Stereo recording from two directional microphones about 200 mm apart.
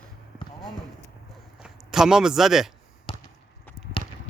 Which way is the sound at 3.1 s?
30° left (ahead or behind).